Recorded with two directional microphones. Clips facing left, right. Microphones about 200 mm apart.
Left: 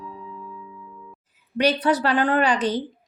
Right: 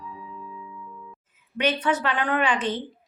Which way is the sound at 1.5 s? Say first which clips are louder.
Left 4 dB; 35° left (ahead or behind).